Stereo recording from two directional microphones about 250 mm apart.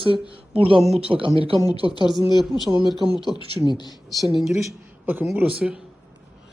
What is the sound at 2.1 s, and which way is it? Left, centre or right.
Speech, centre.